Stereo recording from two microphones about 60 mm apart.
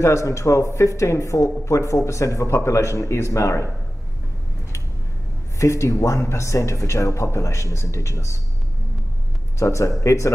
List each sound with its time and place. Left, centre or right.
0.0 s speech: left
5.6 s speech: left
9.6 s speech: left